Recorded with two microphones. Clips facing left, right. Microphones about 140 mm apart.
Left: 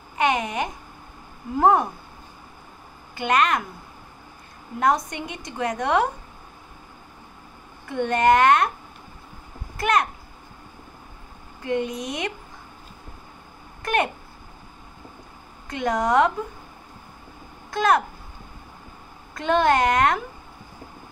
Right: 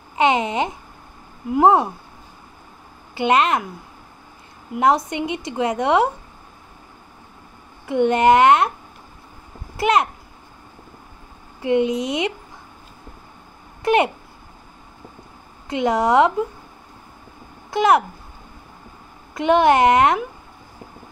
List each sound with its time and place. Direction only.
0.1 s babbling: 20° right (ahead or behind)
1.5 s a woman's voice: 20° right (ahead or behind)
3.2 s a woman's voice: 20° right (ahead or behind)
4.7 s a woman's voice: 20° right (ahead or behind)
7.9 s a woman's voice: 20° right (ahead or behind)
9.8 s a child's voice: 20° right (ahead or behind)
11.6 s a woman's voice: 20° right (ahead or behind)
13.8 s a woman's voice: 20° right (ahead or behind)
15.7 s a woman's voice: 20° right (ahead or behind)
17.6 s speech: 20° right (ahead or behind)
19.3 s a woman's voice: 20° right (ahead or behind)